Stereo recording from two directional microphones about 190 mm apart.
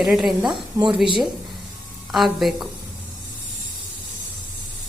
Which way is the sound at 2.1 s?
Centre (ahead or behind).